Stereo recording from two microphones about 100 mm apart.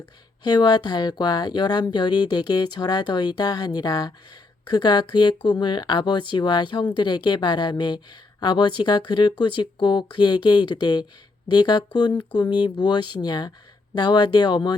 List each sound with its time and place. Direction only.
0.4 s speech: 45° left (ahead or behind)